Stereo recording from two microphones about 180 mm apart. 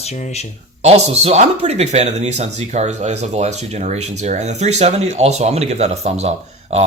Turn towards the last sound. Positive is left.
turn(degrees=-35)  # may be behind; listen again after turning